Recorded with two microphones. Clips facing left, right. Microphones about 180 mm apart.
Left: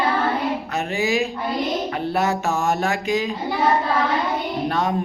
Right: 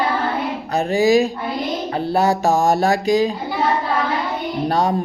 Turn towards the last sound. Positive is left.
turn(degrees=-35)  # may be behind; listen again after turning